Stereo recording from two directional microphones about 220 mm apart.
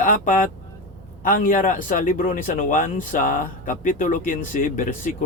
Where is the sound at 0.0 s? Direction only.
40° left (ahead or behind).